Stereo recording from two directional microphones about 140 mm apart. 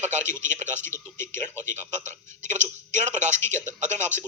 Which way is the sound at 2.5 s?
60° right (ahead or behind).